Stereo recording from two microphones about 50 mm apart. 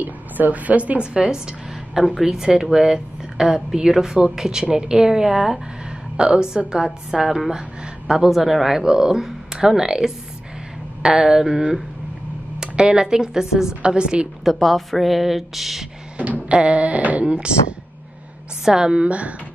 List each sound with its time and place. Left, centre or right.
0.0 s speech: right
2.0 s a woman's voice: centre
8.5 s a woman's voice: centre
14.4 s speech: centre
16.2 s a sound: right
18.6 s a woman's voice: centre
19.0 s a woman's voice: right